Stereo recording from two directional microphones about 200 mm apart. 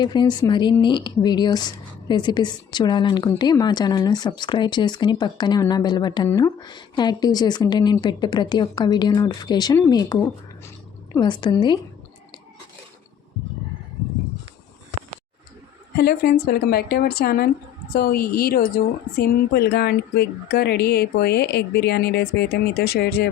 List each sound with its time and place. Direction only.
0.0 s speech: 20° left (ahead or behind)
16.0 s speech: 50° left (ahead or behind)